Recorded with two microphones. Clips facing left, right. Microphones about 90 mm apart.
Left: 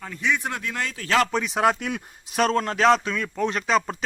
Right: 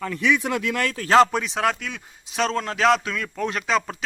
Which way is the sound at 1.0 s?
35° right (ahead or behind).